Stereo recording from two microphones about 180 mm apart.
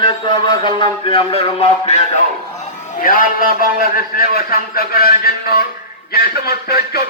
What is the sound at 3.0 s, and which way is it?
A man's voice, 50° left (ahead or behind).